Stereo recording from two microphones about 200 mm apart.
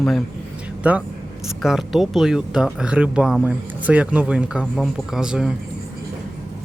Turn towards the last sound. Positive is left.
turn(degrees=-5)  # may be behind; listen again after turning